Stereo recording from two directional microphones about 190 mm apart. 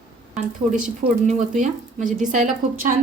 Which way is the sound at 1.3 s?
40° right (ahead or behind).